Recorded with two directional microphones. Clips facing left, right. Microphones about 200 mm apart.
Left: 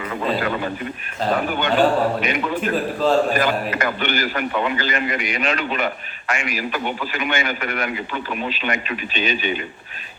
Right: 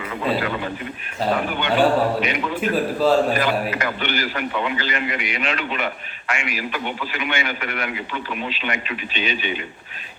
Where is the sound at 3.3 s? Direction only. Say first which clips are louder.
Left 1 dB; 50° left (ahead or behind).